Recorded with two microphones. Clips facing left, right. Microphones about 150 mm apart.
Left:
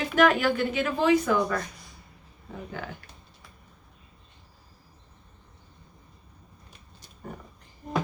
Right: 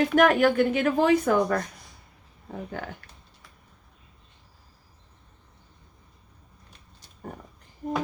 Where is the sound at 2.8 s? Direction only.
50° right (ahead or behind).